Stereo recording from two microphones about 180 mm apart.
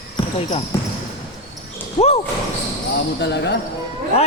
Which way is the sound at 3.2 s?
70° left (ahead or behind).